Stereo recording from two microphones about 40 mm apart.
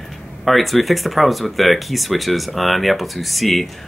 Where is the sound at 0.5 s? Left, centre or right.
Centre.